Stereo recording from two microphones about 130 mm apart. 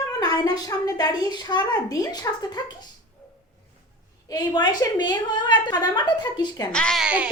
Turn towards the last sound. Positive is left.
turn(degrees=5)  # may be behind; listen again after turning